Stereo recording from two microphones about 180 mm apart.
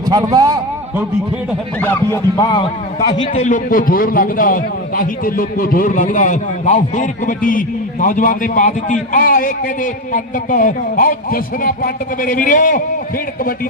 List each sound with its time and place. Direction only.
0.1 s a man's voice: 20° right (ahead or behind)
1.8 s speech: 10° left (ahead or behind)
2.4 s a man's voice: 25° left (ahead or behind)
3.3 s a man's voice: 45° left (ahead or behind)